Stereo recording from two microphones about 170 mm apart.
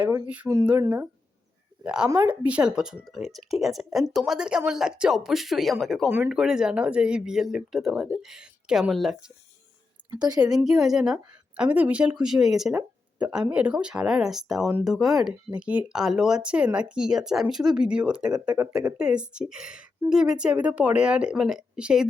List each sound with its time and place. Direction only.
0.4 s speech: centre (ahead or behind)
0.8 s a woman's voice: 20° right (ahead or behind)
1.8 s a woman's voice: 5° right (ahead or behind)
10.0 s a sound: 25° right (ahead or behind)
10.4 s a woman's voice: 5° right (ahead or behind); by 18.9 s 20° right (ahead or behind)
18.9 s speech: 5° right (ahead or behind)